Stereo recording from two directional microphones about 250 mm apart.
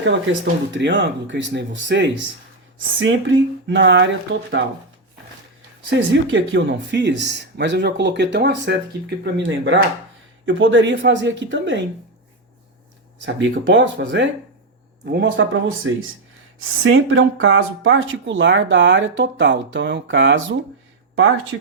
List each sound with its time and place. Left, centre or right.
0.0 s speech: right
5.9 s speech: right
13.2 s speech: right